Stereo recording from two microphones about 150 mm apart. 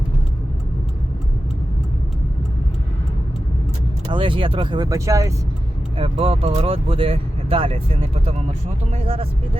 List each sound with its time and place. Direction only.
4.1 s speech: 35° right (ahead or behind)
6.0 s speech: 40° right (ahead or behind)